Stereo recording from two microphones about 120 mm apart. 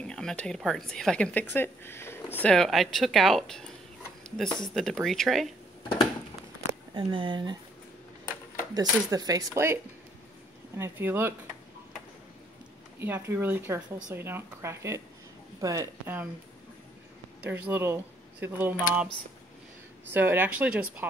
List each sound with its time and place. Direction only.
0.0 s speech: 5° left (ahead or behind)
2.5 s speech: centre (ahead or behind)
6.9 s speech: 40° right (ahead or behind)
8.7 s speech: 30° right (ahead or behind)
10.8 s speech: 15° right (ahead or behind)
13.0 s speech: 20° right (ahead or behind)
17.4 s speech: 15° right (ahead or behind)
20.1 s speech: 15° right (ahead or behind)